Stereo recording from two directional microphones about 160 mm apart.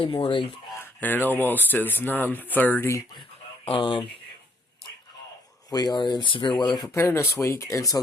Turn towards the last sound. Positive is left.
turn(degrees=20)  # may be behind; listen again after turning